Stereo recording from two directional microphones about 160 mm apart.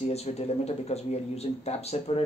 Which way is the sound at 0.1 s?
40° left (ahead or behind).